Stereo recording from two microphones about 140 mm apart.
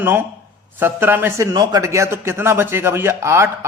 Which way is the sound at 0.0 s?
15° right (ahead or behind).